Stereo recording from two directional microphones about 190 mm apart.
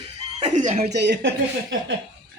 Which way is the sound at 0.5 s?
35° right (ahead or behind).